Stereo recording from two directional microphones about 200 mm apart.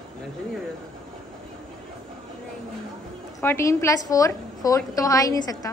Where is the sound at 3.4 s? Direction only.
15° left (ahead or behind).